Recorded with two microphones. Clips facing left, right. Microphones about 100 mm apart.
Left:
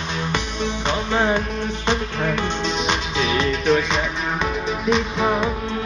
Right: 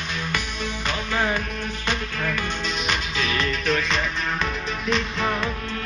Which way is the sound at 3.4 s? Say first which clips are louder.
Left 6 dB; centre (ahead or behind).